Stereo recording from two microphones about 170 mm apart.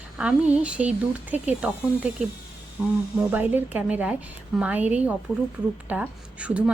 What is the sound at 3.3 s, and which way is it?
A woman's voice, 10° right (ahead or behind).